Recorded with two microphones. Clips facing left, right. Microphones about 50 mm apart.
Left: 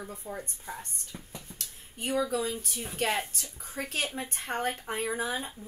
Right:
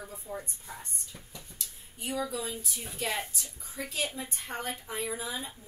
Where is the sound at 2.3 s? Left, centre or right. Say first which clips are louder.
Left 5 dB; left.